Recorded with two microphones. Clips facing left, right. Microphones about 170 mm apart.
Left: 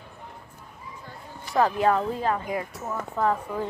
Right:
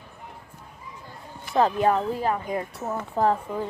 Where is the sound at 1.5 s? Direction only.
25° right (ahead or behind).